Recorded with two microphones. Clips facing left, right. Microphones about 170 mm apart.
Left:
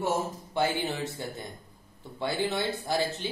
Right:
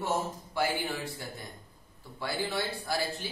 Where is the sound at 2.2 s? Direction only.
20° left (ahead or behind).